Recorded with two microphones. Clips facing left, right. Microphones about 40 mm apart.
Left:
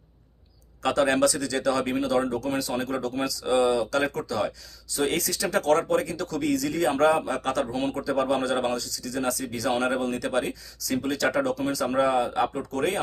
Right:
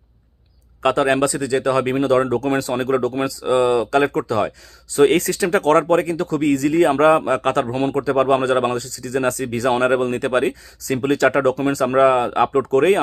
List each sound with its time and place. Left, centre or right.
0.8 s a man's voice: right